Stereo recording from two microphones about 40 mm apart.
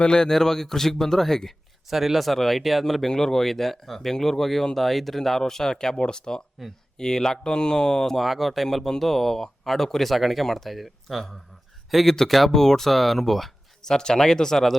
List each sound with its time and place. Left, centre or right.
0.0 s speech: centre
1.9 s speech: centre
8.2 s speech: centre
13.8 s speech: centre